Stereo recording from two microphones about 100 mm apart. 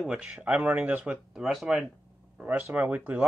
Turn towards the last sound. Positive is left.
turn(degrees=-15)  # may be behind; listen again after turning